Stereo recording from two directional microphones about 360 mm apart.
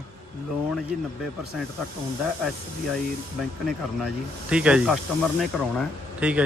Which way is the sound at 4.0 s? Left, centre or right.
Centre.